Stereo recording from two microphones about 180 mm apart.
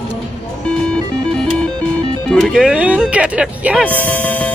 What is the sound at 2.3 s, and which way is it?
Speech, centre (ahead or behind).